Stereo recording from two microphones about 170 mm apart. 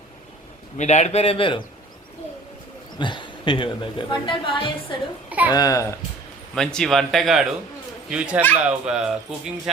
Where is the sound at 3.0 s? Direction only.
30° left (ahead or behind).